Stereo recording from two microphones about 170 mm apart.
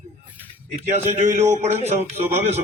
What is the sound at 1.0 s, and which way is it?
Speech, 45° right (ahead or behind).